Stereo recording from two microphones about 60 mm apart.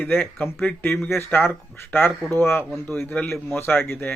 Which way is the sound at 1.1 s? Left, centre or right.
Left.